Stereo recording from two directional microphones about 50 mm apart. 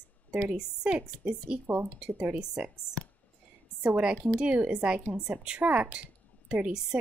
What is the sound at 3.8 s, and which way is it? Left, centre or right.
Speech, centre.